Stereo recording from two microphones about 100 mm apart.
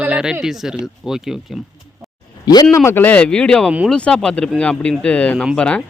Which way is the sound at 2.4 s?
40° left (ahead or behind).